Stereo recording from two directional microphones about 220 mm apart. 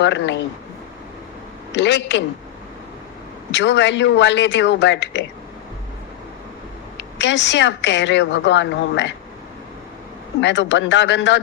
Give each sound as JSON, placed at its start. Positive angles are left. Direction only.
{"t": 0.0, "sound": "speech", "side_deg": 55}
{"t": 1.7, "sound": "speech", "side_deg": 55}
{"t": 3.5, "sound": "speech", "side_deg": 55}
{"t": 6.9, "sound": "speech", "side_deg": 55}
{"t": 10.4, "sound": "speech", "side_deg": 55}